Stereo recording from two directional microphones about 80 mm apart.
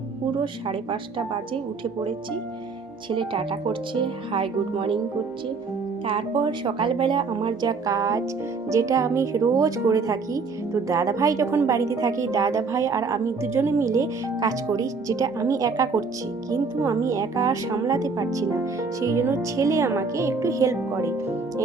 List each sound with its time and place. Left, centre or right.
0.3 s a woman's voice: right
6.1 s a woman's voice: right